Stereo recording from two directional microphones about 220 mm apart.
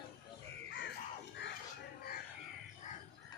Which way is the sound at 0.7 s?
50° left (ahead or behind).